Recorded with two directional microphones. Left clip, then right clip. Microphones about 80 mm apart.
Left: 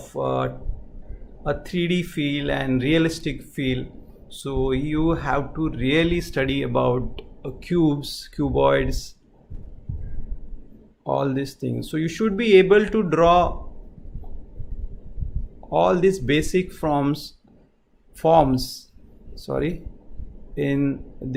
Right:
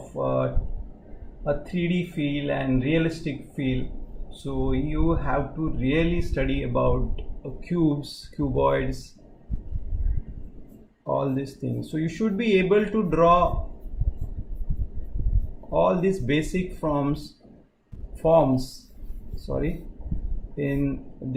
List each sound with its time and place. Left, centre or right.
0.3 s a sound: left
1.5 s speech: left
11.0 s speech: left
11.9 s speech: left
15.7 s speech: left
18.2 s speech: left
19.5 s speech: left